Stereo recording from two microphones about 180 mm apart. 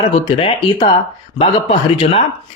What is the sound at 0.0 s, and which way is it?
Speech, 35° left (ahead or behind).